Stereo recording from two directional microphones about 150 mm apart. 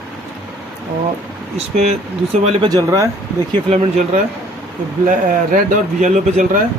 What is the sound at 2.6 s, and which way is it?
Speech, 25° right (ahead or behind).